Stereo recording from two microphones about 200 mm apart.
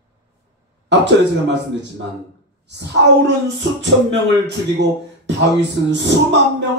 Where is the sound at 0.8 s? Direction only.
60° right (ahead or behind).